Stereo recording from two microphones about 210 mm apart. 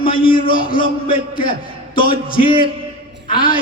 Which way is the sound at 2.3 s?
25° left (ahead or behind).